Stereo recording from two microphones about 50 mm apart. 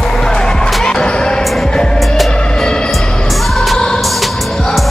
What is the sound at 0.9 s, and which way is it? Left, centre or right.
Basketball bounce, centre.